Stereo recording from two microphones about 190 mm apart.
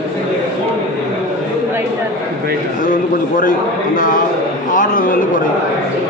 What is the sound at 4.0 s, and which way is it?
A man's voice, 45° left (ahead or behind).